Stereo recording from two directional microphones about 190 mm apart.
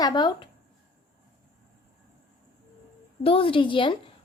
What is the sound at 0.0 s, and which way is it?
Speech, 25° left (ahead or behind).